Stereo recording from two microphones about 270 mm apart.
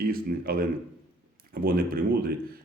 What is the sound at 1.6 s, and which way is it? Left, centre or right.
Speech, right.